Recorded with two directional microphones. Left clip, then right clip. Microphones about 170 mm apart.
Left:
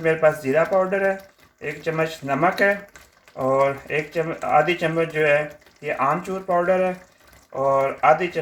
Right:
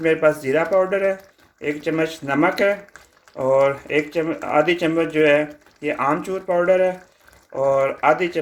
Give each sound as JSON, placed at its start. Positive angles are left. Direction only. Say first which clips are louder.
{"t": 0.0, "sound": "speech", "louder": "right 1 dB", "side_deg": -45}